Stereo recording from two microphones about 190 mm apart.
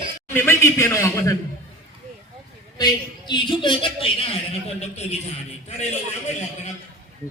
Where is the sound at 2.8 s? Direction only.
25° left (ahead or behind).